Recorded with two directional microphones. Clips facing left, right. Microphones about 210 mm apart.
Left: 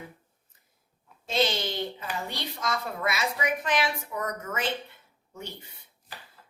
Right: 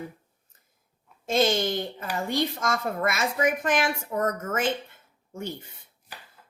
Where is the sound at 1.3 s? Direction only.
50° right (ahead or behind).